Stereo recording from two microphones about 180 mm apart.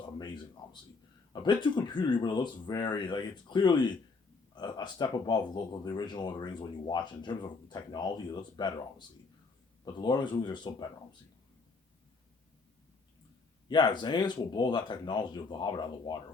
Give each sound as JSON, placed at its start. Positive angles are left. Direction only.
{"t": 0.6, "sound": "speech", "side_deg": 25}
{"t": 13.7, "sound": "speech", "side_deg": 25}